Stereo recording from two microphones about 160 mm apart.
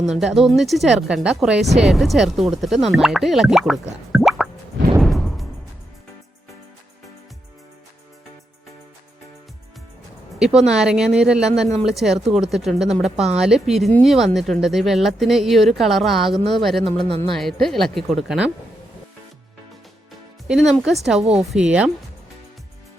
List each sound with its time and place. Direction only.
0.0 s speech: centre (ahead or behind)
4.9 s music: centre (ahead or behind)
10.3 s speech: 5° right (ahead or behind)
20.5 s speech: centre (ahead or behind)